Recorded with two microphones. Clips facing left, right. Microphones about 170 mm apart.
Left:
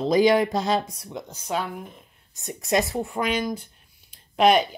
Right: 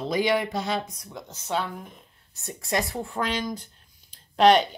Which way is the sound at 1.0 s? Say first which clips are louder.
Left 5 dB; 20° left (ahead or behind).